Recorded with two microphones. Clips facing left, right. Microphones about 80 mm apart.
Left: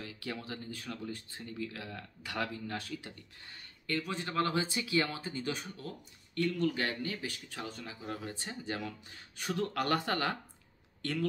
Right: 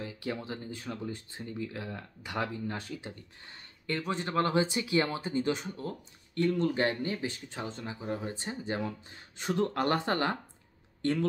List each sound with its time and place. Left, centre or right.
0.0 s speech: right